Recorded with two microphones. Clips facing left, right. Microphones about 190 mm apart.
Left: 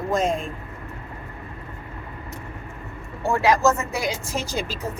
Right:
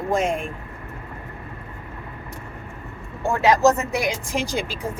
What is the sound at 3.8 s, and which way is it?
Speech, 15° right (ahead or behind).